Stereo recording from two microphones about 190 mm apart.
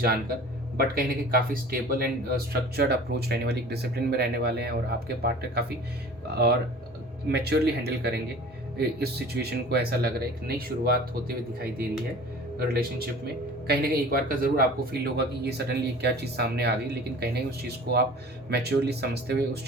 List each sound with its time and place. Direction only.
0.8 s a man's voice: 50° right (ahead or behind)